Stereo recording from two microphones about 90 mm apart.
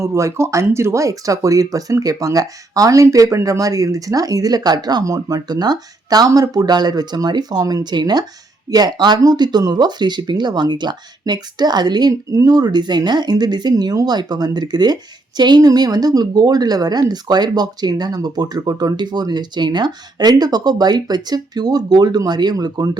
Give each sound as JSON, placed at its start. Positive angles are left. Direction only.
{"t": 0.0, "sound": "speech", "side_deg": -35}